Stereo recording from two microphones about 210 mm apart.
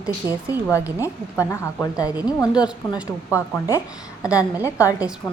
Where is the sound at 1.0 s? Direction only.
15° left (ahead or behind).